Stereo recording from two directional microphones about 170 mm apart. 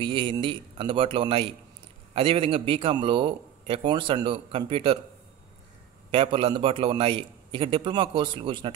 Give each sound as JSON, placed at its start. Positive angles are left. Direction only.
{"t": 0.0, "sound": "a man's voice", "side_deg": -30}
{"t": 6.1, "sound": "a man's voice", "side_deg": -30}